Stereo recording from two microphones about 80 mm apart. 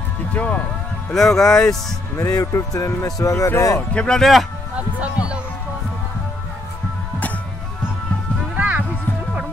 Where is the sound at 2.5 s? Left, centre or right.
Left.